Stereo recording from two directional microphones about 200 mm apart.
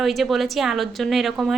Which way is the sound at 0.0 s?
Centre (ahead or behind).